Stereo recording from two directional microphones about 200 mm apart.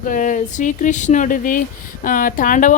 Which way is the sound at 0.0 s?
40° left (ahead or behind).